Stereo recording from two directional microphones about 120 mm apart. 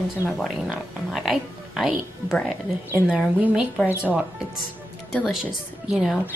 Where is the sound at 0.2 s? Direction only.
20° right (ahead or behind).